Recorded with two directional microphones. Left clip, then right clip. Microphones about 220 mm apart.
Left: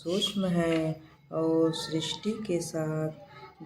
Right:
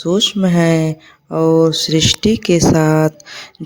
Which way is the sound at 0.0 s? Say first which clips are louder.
Right 14 dB; 40° right (ahead or behind).